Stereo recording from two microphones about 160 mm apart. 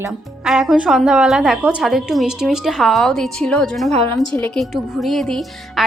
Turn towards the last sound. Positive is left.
turn(degrees=0)  # may be behind; listen again after turning